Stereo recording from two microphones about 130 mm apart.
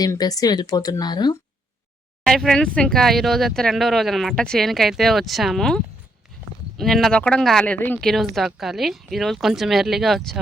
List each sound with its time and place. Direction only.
0.0 s a woman's voice: 30° left (ahead or behind)
2.2 s speech: 5° left (ahead or behind)
8.1 s speech: centre (ahead or behind)